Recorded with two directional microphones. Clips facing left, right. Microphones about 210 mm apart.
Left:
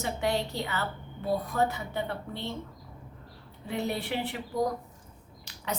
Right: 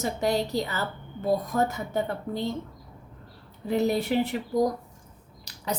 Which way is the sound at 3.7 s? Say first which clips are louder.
Right 7 dB; 40° right (ahead or behind).